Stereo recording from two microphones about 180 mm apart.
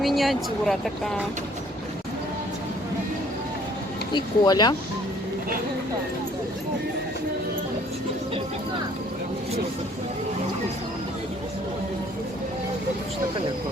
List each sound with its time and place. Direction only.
0.0 s speech: centre (ahead or behind)
4.1 s speech: 20° left (ahead or behind)